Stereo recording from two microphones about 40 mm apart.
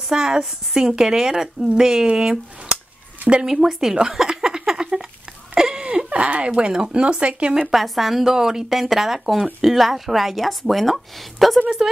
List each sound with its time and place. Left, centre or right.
0.1 s a woman's voice: centre
3.4 s speech: centre
5.5 s a sound: centre
6.0 s speech: right
7.5 s a woman's voice: centre